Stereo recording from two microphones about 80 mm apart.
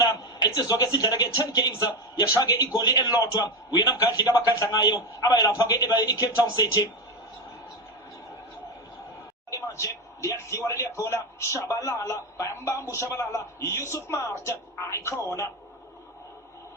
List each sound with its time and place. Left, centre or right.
0.1 s a man's voice: left
9.5 s speech: left